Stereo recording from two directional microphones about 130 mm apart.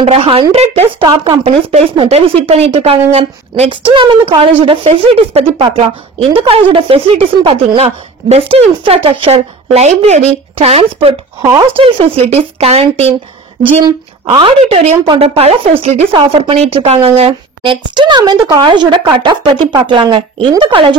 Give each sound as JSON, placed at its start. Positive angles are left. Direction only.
{"t": 0.0, "sound": "speech", "side_deg": -45}
{"t": 1.0, "sound": "a woman's voice", "side_deg": -35}
{"t": 1.4, "sound": "a woman's voice", "side_deg": -50}
{"t": 13.8, "sound": "a woman's voice", "side_deg": -35}
{"t": 14.6, "sound": "a woman's voice", "side_deg": -55}